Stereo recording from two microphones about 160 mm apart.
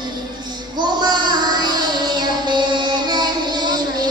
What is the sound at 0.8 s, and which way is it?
Child singing, 25° right (ahead or behind).